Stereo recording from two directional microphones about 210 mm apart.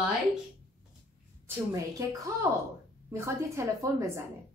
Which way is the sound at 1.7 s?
15° right (ahead or behind).